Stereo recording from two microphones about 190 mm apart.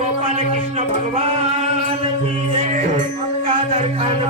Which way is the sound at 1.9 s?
30° right (ahead or behind).